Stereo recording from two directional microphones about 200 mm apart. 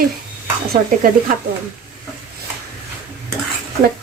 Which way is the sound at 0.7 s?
45° right (ahead or behind).